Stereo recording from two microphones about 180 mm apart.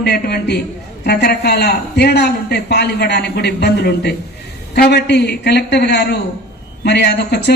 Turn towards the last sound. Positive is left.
turn(degrees=65)  # may be behind; listen again after turning